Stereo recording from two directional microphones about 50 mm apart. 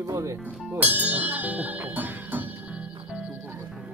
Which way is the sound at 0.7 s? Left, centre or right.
Right.